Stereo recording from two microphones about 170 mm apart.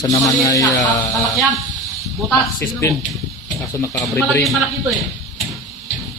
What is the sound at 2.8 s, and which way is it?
Speech, 15° left (ahead or behind).